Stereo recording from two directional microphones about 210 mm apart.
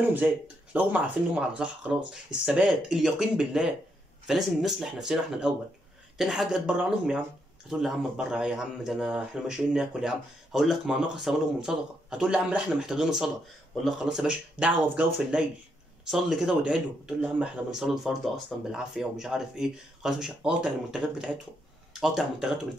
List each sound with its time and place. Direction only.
0.7 s speech: 5° right (ahead or behind)